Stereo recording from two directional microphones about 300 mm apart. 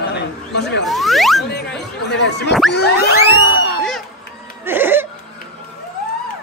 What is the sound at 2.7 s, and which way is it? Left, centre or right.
Music, left.